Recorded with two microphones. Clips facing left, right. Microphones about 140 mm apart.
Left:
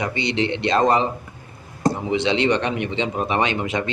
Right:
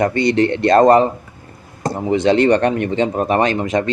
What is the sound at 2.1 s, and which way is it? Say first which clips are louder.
Speech: right 9 dB; 45° right (ahead or behind).